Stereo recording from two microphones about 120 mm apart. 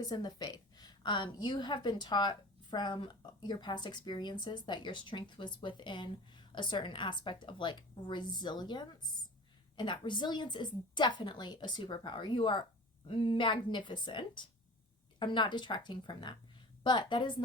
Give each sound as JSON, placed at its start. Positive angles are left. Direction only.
{"t": 0.0, "sound": "a woman's voice", "side_deg": 35}